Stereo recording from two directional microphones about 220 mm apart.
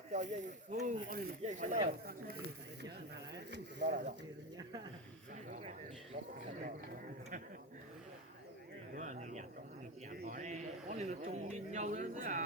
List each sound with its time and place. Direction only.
0.1 s speech: 35° right (ahead or behind)
3.3 s speech: 50° right (ahead or behind)
4.5 s speech: 20° right (ahead or behind)
9.0 s speech: 35° right (ahead or behind)